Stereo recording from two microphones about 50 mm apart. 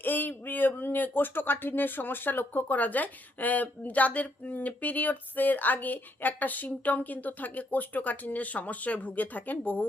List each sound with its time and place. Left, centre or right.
0.0 s speech: left